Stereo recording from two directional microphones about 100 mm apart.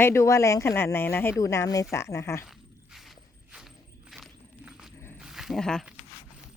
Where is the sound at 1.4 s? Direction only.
35° left (ahead or behind).